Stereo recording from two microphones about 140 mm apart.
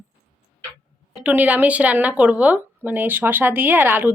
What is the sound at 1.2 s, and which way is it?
Speech, 10° right (ahead or behind).